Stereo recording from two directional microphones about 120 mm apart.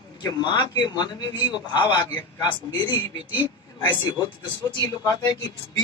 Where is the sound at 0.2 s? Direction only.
35° left (ahead or behind).